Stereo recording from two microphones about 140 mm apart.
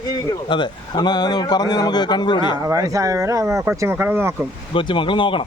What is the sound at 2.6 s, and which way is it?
Speech, 25° right (ahead or behind).